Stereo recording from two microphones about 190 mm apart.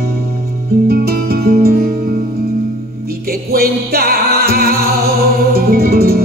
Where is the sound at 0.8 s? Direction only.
55° right (ahead or behind).